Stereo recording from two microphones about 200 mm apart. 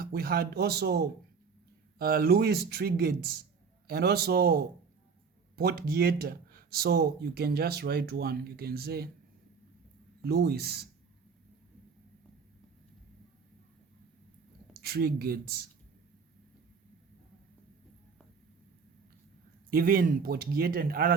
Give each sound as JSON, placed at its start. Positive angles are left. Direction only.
{"t": 0.0, "sound": "speech", "side_deg": -50}
{"t": 10.2, "sound": "speech", "side_deg": -50}
{"t": 14.7, "sound": "speech", "side_deg": -50}
{"t": 19.7, "sound": "speech", "side_deg": -45}